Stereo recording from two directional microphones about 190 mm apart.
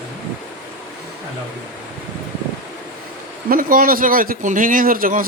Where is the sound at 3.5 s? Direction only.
50° right (ahead or behind).